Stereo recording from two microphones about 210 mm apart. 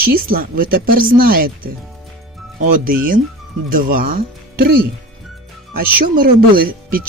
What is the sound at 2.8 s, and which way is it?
Speech, 40° right (ahead or behind).